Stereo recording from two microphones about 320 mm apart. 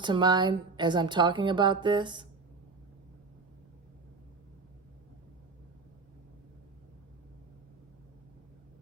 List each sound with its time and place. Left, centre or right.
0.0 s a woman's voice: centre